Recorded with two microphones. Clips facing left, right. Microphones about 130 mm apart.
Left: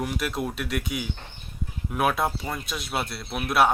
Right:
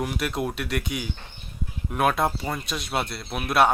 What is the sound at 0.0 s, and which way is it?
Speech, centre (ahead or behind).